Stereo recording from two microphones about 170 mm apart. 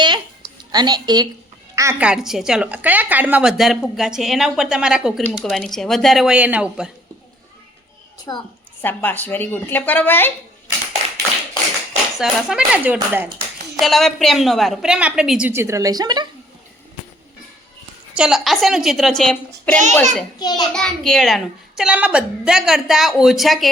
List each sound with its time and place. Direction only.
0.0 s a sound: 25° right (ahead or behind)
1.7 s a woman's voice: 15° right (ahead or behind)
2.0 s a woman's voice: 5° right (ahead or behind)
8.3 s a child's voice: 20° left (ahead or behind)
12.1 s a woman's voice: 5° right (ahead or behind); by 16.2 s 25° right (ahead or behind)
18.1 s a woman's voice: 5° right (ahead or behind)
20.4 s a child's voice: 25° left (ahead or behind)
20.7 s a woman's voice: 5° left (ahead or behind)